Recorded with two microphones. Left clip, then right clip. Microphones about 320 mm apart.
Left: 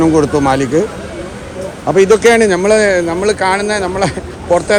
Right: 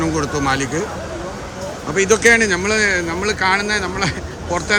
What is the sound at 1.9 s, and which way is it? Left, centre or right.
Speech, centre.